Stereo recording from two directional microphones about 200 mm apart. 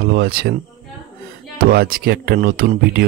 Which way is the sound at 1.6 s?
50° right (ahead or behind).